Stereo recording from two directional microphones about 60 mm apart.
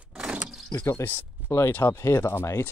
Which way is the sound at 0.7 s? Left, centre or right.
Left.